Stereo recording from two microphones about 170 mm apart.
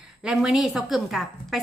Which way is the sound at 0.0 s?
5° right (ahead or behind).